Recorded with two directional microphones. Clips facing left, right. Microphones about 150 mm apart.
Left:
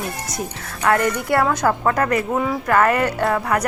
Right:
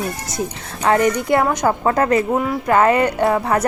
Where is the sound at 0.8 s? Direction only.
20° right (ahead or behind).